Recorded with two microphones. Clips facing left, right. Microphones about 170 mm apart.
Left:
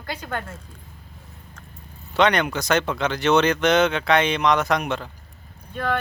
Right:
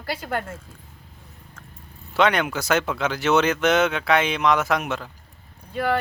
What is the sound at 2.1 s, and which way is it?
Speech, 5° right (ahead or behind).